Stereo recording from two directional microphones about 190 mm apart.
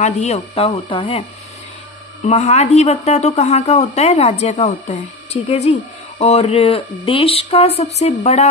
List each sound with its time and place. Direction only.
0.0 s speech: 35° left (ahead or behind)
2.2 s speech: 35° left (ahead or behind)